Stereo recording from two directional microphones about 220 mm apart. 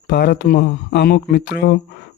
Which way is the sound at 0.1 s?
45° left (ahead or behind).